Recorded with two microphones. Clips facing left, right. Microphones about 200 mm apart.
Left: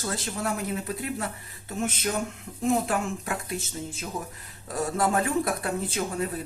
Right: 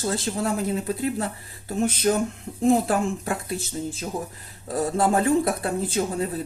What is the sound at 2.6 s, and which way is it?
Speech, 35° right (ahead or behind).